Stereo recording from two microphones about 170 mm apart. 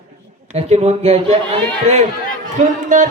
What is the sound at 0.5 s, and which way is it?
Speech, 40° right (ahead or behind).